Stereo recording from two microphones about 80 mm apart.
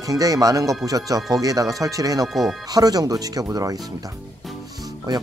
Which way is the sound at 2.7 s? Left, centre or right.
Right.